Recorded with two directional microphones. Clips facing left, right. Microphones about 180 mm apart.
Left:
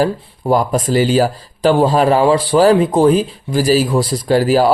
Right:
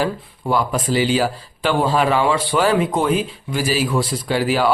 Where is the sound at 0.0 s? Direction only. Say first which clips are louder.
Left 5 dB; 40° left (ahead or behind).